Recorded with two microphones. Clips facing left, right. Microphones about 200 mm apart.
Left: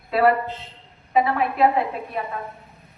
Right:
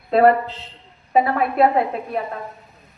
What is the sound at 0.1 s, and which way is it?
A man's voice, 45° right (ahead or behind).